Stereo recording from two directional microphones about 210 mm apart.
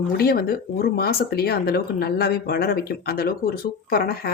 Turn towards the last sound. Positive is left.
turn(degrees=45)  # may be behind; listen again after turning